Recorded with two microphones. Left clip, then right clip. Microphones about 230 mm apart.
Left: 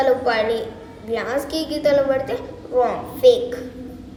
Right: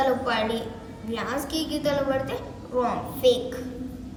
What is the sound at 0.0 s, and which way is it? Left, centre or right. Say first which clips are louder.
A woman's voice: left 6 dB; centre.